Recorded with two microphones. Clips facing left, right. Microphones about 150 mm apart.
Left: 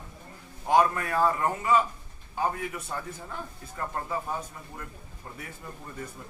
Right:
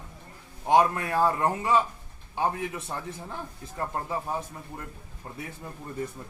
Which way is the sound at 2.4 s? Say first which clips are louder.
Right 1 dB; 25° right (ahead or behind).